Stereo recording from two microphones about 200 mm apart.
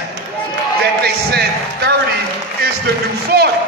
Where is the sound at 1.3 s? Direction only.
55° right (ahead or behind).